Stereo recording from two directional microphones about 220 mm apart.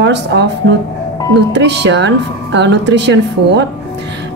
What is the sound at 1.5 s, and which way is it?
A woman's voice, 50° right (ahead or behind).